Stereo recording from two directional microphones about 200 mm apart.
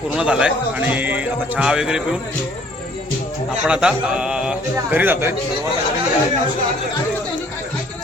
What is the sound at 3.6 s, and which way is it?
Speech, 5° right (ahead or behind).